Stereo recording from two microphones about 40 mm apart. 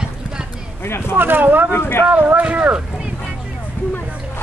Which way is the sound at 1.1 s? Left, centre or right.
Right.